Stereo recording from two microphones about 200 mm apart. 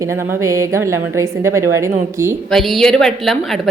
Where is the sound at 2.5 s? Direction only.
Centre (ahead or behind).